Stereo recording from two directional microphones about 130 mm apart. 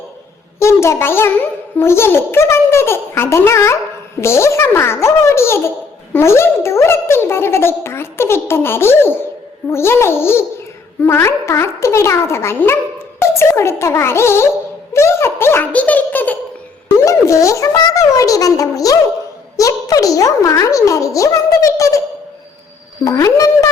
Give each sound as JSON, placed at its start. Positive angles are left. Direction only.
{"t": 0.6, "sound": "a child's voice", "side_deg": 20}
{"t": 14.9, "sound": "a sound", "side_deg": 20}
{"t": 17.0, "sound": "speech", "side_deg": 25}
{"t": 23.0, "sound": "speech", "side_deg": 25}